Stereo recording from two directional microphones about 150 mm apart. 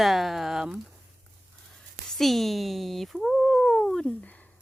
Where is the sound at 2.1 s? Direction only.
Centre (ahead or behind).